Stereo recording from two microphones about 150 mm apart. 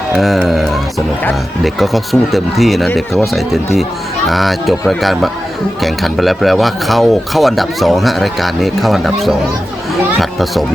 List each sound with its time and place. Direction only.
0.2 s speech: centre (ahead or behind)